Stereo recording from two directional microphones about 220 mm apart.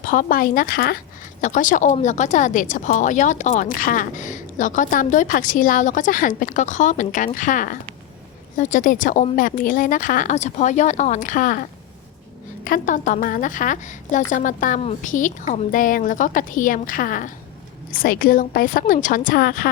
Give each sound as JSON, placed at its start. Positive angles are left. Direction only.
{"t": 0.0, "sound": "speech", "side_deg": 40}